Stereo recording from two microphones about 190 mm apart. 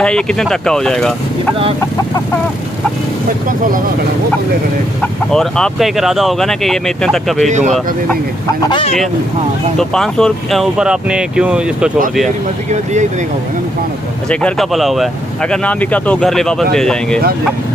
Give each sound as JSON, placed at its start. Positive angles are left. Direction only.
{"t": 0.0, "sound": "speech", "side_deg": 5}
{"t": 5.0, "sound": "speech", "side_deg": 5}
{"t": 7.4, "sound": "speech", "side_deg": -40}
{"t": 8.6, "sound": "speech", "side_deg": 25}
{"t": 9.8, "sound": "speech", "side_deg": 0}
{"t": 14.3, "sound": "speech", "side_deg": 5}